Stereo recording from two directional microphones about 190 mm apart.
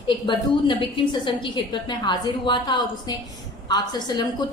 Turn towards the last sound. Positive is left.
turn(degrees=20)  # may be behind; listen again after turning